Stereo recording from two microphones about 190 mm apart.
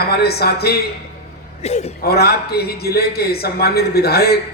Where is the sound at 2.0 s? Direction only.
55° left (ahead or behind).